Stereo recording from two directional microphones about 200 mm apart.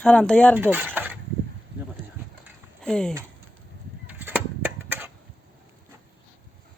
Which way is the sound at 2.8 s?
5° left (ahead or behind).